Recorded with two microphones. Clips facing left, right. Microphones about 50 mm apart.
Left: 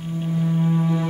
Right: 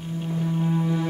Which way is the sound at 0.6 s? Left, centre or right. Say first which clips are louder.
Left 2 dB; centre.